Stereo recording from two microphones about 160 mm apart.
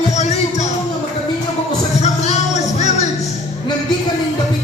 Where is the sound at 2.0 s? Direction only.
45° left (ahead or behind).